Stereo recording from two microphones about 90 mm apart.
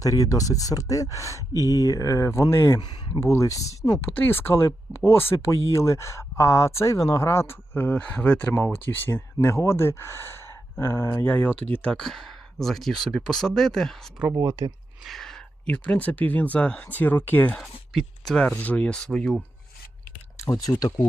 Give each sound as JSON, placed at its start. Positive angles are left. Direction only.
{"t": 0.0, "sound": "speech", "side_deg": 40}
{"t": 4.1, "sound": "speech", "side_deg": 20}
{"t": 11.1, "sound": "speech", "side_deg": 20}
{"t": 11.9, "sound": "speech", "side_deg": 5}
{"t": 14.3, "sound": "speech", "side_deg": -40}
{"t": 15.0, "sound": "a sound", "side_deg": 0}
{"t": 15.7, "sound": "speech", "side_deg": 15}
{"t": 17.5, "sound": "speech", "side_deg": 5}
{"t": 18.4, "sound": "speech", "side_deg": 15}
{"t": 20.3, "sound": "a sound", "side_deg": 35}
{"t": 20.7, "sound": "speech", "side_deg": 45}